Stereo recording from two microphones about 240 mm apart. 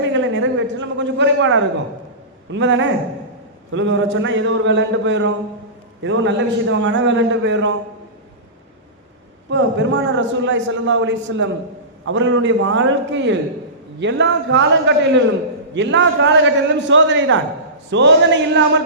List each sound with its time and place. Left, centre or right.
0.0 s a sound: right
2.5 s a man's voice: right
9.5 s a man's voice: right